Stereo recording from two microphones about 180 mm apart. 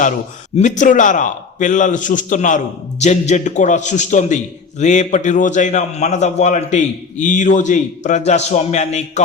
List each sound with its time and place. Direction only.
0.5 s a man's voice: 45° left (ahead or behind)